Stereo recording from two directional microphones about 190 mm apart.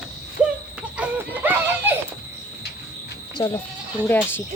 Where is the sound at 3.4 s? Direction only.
20° left (ahead or behind).